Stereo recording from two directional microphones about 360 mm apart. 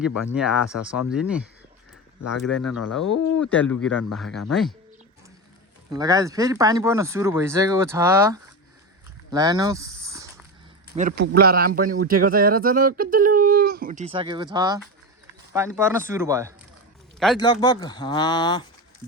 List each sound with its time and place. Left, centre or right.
0.3 s speech: centre
3.0 s speech: left
3.4 s speech: centre
5.9 s speech: centre
9.3 s a sound: centre
10.8 s speech: right; by 16.6 s centre
17.4 s speech: centre